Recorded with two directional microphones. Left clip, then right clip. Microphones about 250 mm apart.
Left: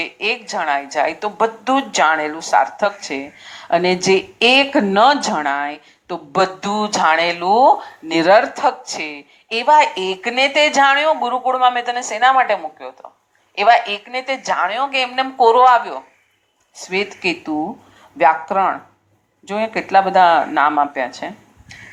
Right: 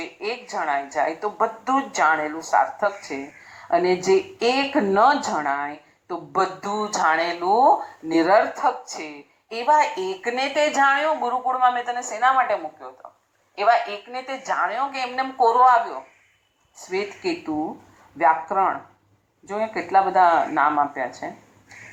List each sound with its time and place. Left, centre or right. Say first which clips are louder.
0.0 s a woman's voice: left 9 dB; left
18.2 s speech: left 5 dB; left